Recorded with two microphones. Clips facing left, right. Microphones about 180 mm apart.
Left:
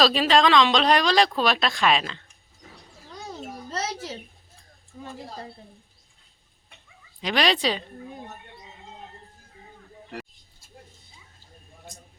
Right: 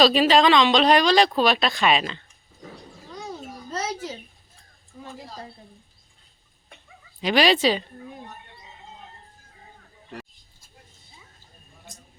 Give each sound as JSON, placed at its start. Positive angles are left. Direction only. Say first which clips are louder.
{"t": 0.0, "sound": "speech", "louder": "right 3 dB", "side_deg": 0}
{"t": 7.2, "sound": "speech", "louder": "right 4 dB", "side_deg": -5}